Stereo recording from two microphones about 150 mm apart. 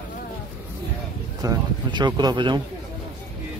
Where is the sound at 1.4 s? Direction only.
30° right (ahead or behind).